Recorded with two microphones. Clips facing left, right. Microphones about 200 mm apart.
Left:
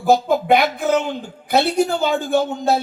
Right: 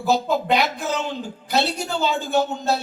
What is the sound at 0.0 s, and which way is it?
A man's voice, 50° left (ahead or behind).